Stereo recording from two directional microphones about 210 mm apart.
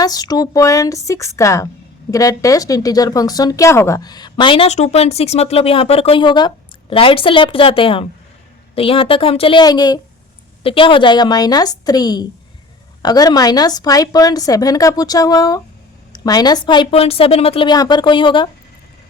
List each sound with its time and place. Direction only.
0.0 s a woman's voice: 20° left (ahead or behind)